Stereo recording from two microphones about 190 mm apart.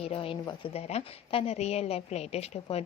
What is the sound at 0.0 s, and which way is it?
A woman's voice, 30° left (ahead or behind).